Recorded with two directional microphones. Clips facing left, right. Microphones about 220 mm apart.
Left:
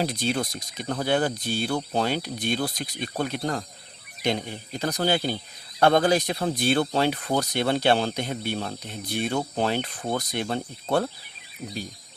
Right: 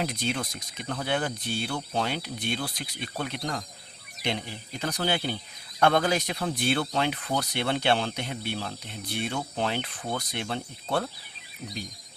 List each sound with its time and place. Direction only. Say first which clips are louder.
0.0 s speech: left 4 dB; 35° left (ahead or behind)